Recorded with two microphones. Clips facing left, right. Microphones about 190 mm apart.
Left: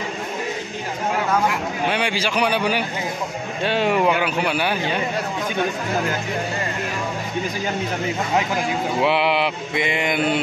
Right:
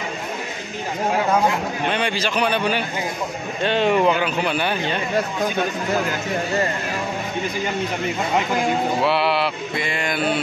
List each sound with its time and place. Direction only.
1.9 s a man's voice: 10° left (ahead or behind)
9.0 s mantra: 15° left (ahead or behind)